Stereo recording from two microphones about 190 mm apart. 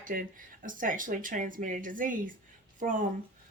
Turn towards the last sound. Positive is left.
turn(degrees=-45)  # may be behind; listen again after turning